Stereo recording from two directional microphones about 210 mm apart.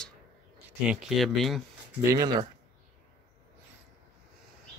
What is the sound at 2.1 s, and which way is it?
Speech, 20° right (ahead or behind).